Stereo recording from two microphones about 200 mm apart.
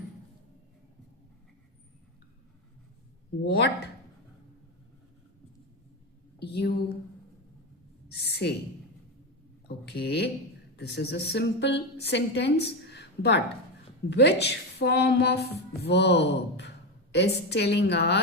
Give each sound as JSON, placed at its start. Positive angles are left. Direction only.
{"t": 3.4, "sound": "speech", "side_deg": 50}
{"t": 6.4, "sound": "a woman's voice", "side_deg": 55}
{"t": 8.2, "sound": "a woman's voice", "side_deg": 55}
{"t": 9.6, "sound": "a woman's voice", "side_deg": 50}
{"t": 12.9, "sound": "a sound", "side_deg": 60}
{"t": 14.1, "sound": "a woman's voice", "side_deg": 55}